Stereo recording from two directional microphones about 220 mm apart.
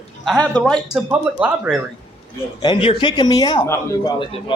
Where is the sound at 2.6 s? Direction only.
20° left (ahead or behind).